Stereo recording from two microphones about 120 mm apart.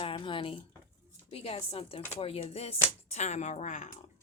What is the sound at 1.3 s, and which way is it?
Speech, 55° left (ahead or behind).